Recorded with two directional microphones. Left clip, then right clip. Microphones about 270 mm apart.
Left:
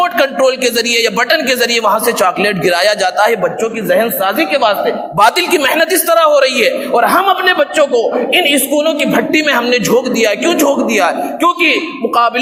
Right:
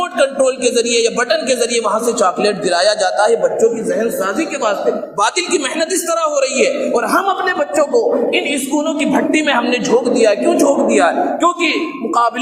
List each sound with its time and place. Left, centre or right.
0.0 s a man's voice: left